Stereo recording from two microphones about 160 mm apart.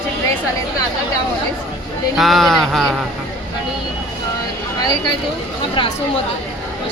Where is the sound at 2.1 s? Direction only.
Centre (ahead or behind).